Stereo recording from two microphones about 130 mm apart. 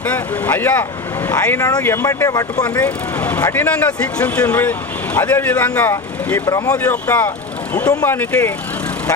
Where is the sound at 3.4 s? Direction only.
20° left (ahead or behind).